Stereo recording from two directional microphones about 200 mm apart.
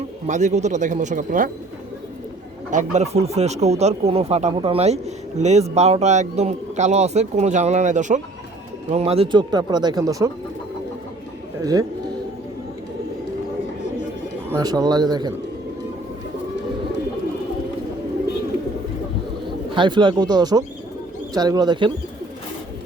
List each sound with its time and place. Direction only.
0.3 s speech: 35° right (ahead or behind)
2.6 s speech: 40° right (ahead or behind); by 10.2 s 15° right (ahead or behind)
11.6 s a man's voice: 15° right (ahead or behind)
14.5 s speech: 20° right (ahead or behind)
19.7 s speech: 25° right (ahead or behind)